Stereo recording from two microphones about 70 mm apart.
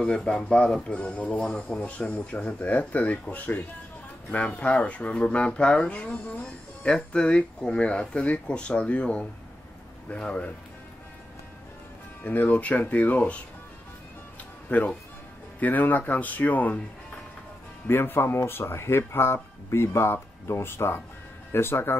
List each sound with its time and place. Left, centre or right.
0.0 s speech: centre
12.2 s speech: left
14.7 s speech: centre
17.8 s speech: left